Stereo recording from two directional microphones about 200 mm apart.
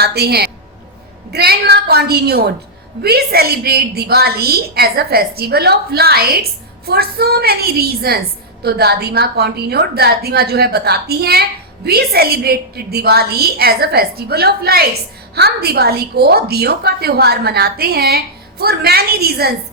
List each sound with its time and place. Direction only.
0.0 s a woman's voice: 55° right (ahead or behind)